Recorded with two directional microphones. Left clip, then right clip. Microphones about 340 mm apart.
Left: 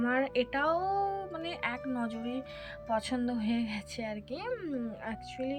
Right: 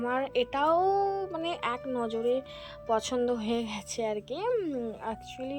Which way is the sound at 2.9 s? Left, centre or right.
Centre.